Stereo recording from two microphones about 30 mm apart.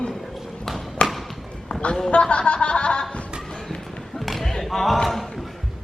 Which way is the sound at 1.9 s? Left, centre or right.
Left.